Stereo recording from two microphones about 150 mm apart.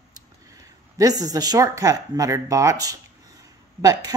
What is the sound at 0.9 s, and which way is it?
A woman's voice, 25° right (ahead or behind).